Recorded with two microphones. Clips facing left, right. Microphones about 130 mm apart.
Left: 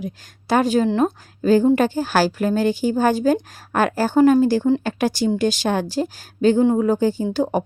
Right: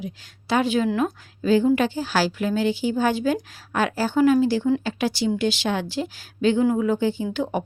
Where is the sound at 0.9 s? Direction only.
30° left (ahead or behind).